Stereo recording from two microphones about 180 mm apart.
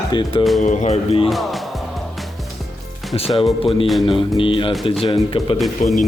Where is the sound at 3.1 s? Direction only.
30° left (ahead or behind).